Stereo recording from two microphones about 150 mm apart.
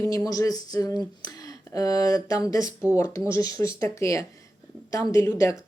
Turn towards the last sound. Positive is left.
turn(degrees=20)  # may be behind; listen again after turning